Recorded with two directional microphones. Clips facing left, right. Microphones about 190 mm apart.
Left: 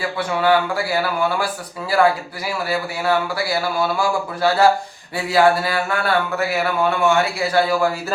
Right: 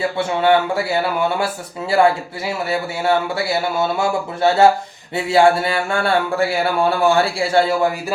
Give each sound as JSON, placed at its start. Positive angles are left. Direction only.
{"t": 0.0, "sound": "speech", "side_deg": -25}